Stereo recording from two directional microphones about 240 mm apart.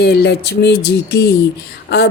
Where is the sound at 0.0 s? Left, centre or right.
Left.